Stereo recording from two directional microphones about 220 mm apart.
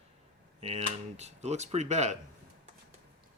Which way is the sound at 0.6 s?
30° right (ahead or behind).